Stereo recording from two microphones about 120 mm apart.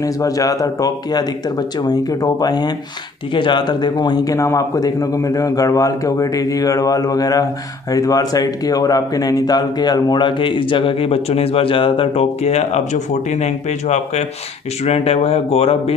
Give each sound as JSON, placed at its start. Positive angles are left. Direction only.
{"t": 0.0, "sound": "a man's voice", "side_deg": 30}
{"t": 14.8, "sound": "speech", "side_deg": 60}